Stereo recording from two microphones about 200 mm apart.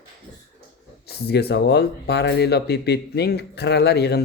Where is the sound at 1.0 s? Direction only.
55° left (ahead or behind).